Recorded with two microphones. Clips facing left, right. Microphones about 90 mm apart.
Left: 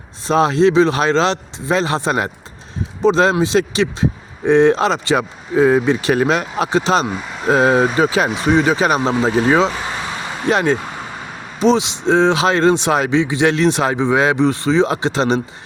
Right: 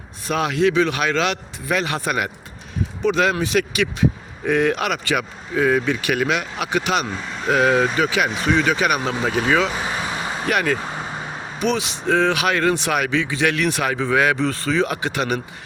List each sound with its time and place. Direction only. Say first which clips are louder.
0.3 s speech: left 6 dB; 30° left (ahead or behind)